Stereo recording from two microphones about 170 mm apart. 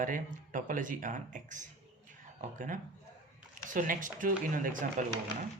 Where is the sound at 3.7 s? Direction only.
55° right (ahead or behind).